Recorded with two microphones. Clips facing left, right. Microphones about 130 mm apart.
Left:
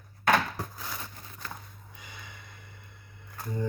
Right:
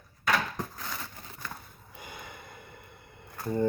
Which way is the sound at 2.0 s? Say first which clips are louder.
Right 5 dB; 50° right (ahead or behind).